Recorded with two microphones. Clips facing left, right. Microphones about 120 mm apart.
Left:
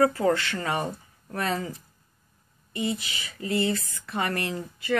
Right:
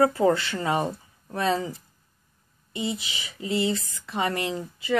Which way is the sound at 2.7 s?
20° right (ahead or behind).